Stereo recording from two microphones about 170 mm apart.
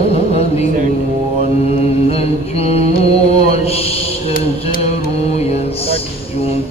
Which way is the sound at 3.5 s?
35° left (ahead or behind).